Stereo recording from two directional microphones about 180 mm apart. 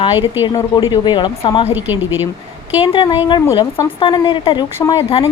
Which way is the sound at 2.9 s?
25° left (ahead or behind).